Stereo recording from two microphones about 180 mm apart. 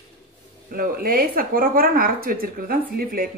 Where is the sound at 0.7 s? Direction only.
55° right (ahead or behind).